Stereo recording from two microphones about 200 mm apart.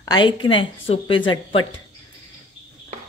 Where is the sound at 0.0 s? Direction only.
20° left (ahead or behind).